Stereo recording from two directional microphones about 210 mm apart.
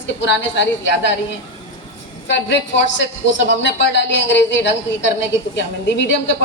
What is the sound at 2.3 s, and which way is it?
A woman's voice, 60° left (ahead or behind).